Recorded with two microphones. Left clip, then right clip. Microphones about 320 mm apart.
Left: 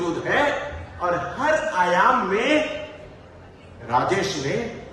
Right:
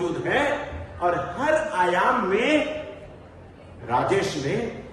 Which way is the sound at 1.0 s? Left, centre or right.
Centre.